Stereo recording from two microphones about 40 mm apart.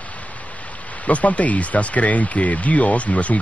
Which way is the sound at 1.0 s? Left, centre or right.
Left.